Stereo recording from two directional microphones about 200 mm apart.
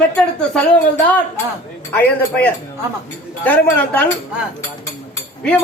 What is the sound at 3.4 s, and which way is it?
Speech, 10° left (ahead or behind).